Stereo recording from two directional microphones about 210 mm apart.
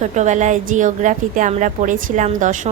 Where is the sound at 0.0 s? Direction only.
35° right (ahead or behind).